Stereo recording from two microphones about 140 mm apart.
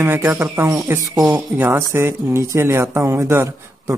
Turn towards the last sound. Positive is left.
turn(degrees=-20)  # may be behind; listen again after turning